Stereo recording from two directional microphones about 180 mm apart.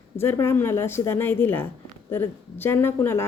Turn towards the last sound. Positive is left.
turn(degrees=15)  # may be behind; listen again after turning